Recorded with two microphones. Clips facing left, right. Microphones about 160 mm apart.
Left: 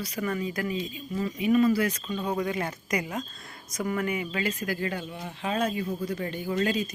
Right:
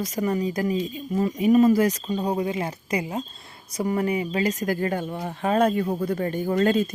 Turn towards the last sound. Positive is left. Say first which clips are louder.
# right 6 dB
turn(degrees=-50)  # may be behind; listen again after turning